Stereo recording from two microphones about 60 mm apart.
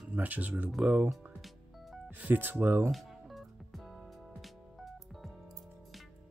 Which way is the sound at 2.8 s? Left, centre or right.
Centre.